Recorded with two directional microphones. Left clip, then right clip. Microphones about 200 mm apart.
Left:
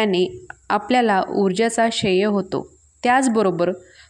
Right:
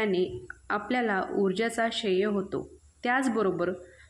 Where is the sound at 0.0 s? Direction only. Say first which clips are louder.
Left 8 dB; 40° left (ahead or behind).